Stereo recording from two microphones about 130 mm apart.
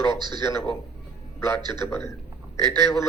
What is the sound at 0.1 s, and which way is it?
Speech, 35° right (ahead or behind).